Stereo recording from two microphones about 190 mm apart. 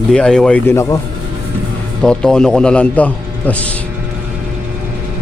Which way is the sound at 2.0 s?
5° left (ahead or behind).